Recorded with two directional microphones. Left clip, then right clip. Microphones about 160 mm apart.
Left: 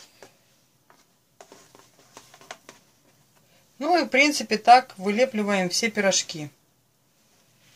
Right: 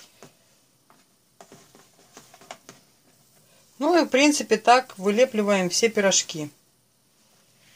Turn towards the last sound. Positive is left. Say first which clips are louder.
# right 1 dB
turn(degrees=-35)  # may be behind; listen again after turning